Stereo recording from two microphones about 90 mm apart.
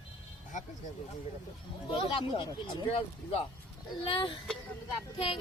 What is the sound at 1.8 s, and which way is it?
Speech, 70° left (ahead or behind).